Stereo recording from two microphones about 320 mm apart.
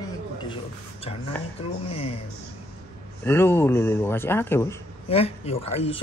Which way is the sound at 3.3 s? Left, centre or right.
Centre.